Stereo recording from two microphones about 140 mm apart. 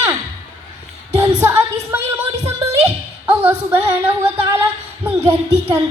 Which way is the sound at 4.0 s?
15° right (ahead or behind).